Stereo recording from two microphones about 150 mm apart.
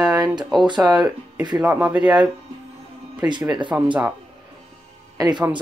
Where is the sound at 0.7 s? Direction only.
5° right (ahead or behind).